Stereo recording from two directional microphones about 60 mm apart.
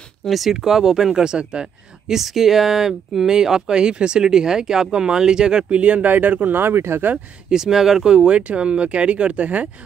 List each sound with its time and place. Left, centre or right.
0.2 s speech: centre; by 7.1 s right
7.4 s speech: centre